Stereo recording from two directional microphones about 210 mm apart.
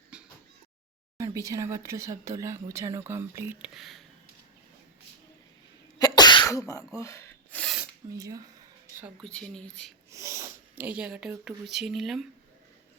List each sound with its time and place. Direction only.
0.1 s a sound: 5° right (ahead or behind)
1.2 s speech: 15° right (ahead or behind)
6.0 s sneeze: 20° left (ahead or behind)
7.8 s a sound: 15° right (ahead or behind)
9.2 s speech: 5° left (ahead or behind)
10.1 s speech: 15° right (ahead or behind)